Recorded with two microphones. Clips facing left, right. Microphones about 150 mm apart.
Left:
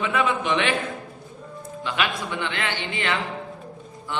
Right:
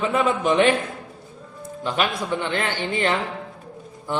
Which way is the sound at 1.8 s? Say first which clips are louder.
Right 3 dB; 40° right (ahead or behind).